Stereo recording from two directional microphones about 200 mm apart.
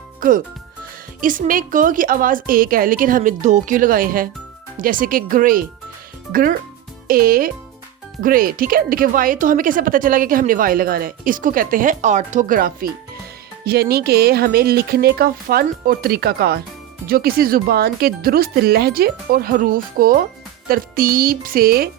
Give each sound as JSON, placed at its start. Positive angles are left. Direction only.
{"t": 0.2, "sound": "speech", "side_deg": -45}
{"t": 7.1, "sound": "speech", "side_deg": -45}